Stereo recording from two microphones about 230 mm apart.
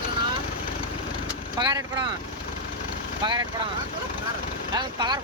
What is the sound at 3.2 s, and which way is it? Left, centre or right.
Speech, centre.